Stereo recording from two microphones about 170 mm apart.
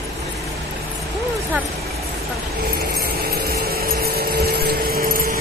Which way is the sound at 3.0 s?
65° right (ahead or behind).